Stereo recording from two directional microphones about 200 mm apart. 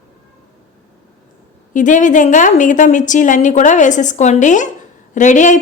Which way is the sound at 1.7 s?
40° left (ahead or behind).